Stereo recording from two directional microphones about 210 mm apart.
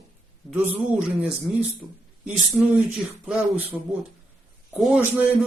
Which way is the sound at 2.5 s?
Centre (ahead or behind).